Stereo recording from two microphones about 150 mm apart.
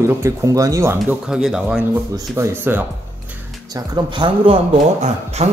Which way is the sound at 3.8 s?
30° right (ahead or behind).